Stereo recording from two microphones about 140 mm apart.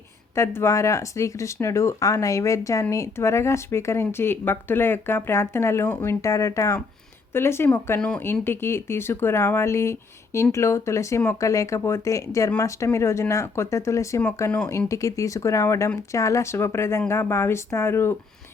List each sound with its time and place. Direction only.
0.3 s speech: 20° left (ahead or behind)